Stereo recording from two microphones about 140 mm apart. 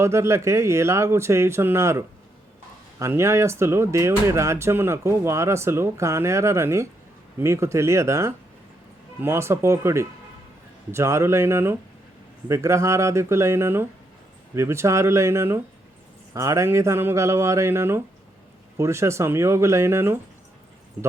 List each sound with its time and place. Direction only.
0.0 s speech: 20° right (ahead or behind)